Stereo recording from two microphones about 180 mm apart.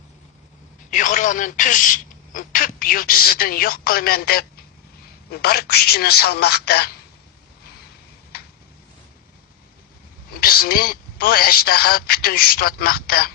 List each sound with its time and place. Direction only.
0.9 s a man's voice: 45° left (ahead or behind); by 6.9 s 60° left (ahead or behind)
8.3 s a sound: 60° left (ahead or behind)
10.4 s a man's voice: 55° left (ahead or behind)